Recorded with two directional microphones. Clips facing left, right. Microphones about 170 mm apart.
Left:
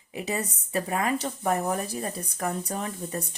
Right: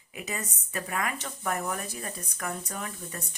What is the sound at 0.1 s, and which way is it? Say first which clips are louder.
A woman's voice: left 6 dB; 30° left (ahead or behind).